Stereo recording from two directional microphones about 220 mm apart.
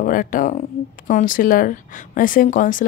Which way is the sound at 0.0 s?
40° left (ahead or behind).